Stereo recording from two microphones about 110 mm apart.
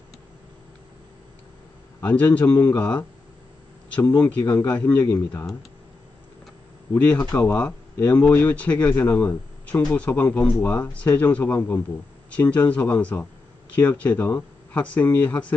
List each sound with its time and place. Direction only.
2.0 s speech: 15° left (ahead or behind)
7.2 s speech: 30° left (ahead or behind)
7.4 s speech: 15° left (ahead or behind)